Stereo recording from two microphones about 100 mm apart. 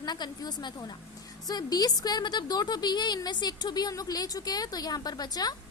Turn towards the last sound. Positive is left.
turn(degrees=40)  # may be behind; listen again after turning